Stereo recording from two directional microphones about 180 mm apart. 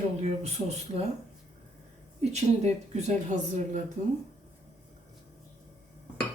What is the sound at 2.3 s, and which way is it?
Speech, 40° right (ahead or behind).